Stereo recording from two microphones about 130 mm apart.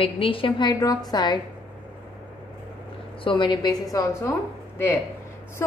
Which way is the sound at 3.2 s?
40° left (ahead or behind).